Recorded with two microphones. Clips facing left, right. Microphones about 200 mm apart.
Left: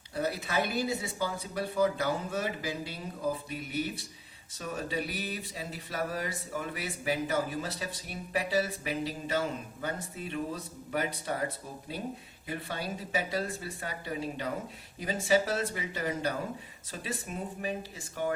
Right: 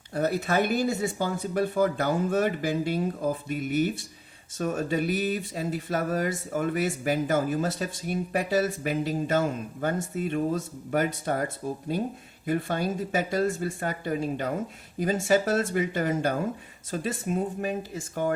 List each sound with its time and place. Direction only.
0.1 s speech: 50° right (ahead or behind)